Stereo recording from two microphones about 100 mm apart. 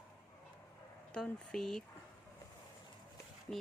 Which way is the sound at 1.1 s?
5° left (ahead or behind).